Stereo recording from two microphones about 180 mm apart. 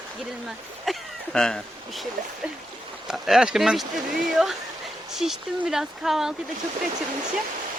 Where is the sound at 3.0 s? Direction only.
Centre (ahead or behind).